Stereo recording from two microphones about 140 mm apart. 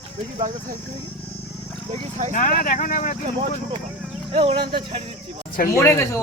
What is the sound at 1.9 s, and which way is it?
Speech, 50° right (ahead or behind).